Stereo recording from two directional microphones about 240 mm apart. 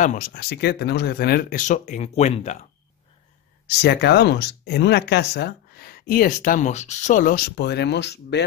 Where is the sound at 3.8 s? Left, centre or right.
Left.